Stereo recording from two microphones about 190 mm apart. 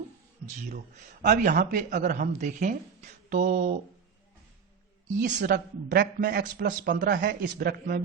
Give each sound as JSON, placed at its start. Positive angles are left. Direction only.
{"t": 1.2, "sound": "a man's voice", "side_deg": -45}
{"t": 5.2, "sound": "a woman's voice", "side_deg": -40}
{"t": 5.5, "sound": "a man's voice", "side_deg": -55}